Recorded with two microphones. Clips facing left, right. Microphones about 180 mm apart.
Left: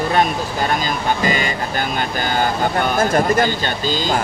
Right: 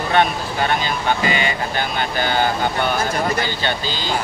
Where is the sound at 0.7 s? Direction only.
40° left (ahead or behind).